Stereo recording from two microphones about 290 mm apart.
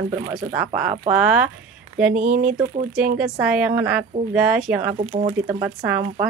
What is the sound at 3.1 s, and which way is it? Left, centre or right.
Speech, centre.